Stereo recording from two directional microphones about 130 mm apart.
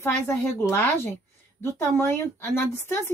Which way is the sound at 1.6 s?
20° left (ahead or behind).